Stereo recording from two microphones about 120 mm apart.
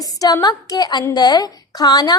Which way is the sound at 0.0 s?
30° left (ahead or behind).